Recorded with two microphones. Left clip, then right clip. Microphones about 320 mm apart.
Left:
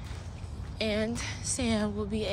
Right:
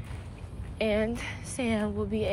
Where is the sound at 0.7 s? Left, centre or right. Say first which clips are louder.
Right 3 dB; centre.